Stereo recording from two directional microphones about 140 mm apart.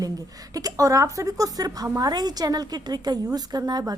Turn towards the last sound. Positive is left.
turn(degrees=-30)  # may be behind; listen again after turning